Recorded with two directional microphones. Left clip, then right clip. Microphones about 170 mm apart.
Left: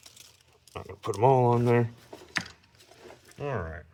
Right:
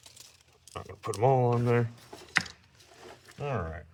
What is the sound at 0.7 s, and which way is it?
Speech, 25° left (ahead or behind).